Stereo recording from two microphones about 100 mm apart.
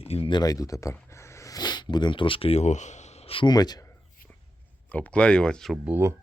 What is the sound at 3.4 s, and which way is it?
Speech, 40° left (ahead or behind).